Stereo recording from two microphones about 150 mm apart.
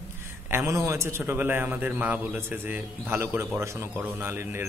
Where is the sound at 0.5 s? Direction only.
20° right (ahead or behind).